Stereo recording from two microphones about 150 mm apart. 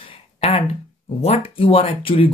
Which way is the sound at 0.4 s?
40° left (ahead or behind).